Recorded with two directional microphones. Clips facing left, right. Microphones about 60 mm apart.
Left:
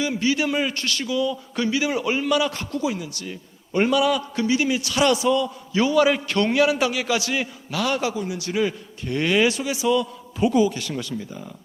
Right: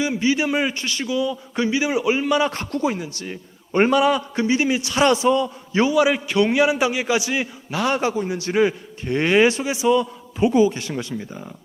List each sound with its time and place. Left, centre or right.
0.0 s a man's voice: right
2.4 s a man's voice: right
5.9 s a man's voice: centre
7.8 s a man's voice: right